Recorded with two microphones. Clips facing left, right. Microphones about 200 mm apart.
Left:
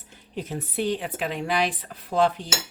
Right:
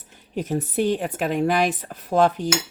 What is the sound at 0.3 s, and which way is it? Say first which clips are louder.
A woman's voice: right 6 dB; 45° right (ahead or behind).